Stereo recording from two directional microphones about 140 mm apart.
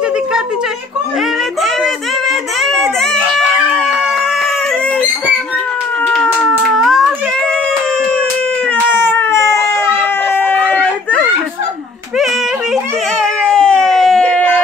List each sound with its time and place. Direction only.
2.6 s baby cry: centre (ahead or behind)
6.0 s cat: 5° left (ahead or behind)
6.7 s a sound: centre (ahead or behind)
8.9 s baby cry: 15° left (ahead or behind)
13.2 s baby cry: 5° left (ahead or behind)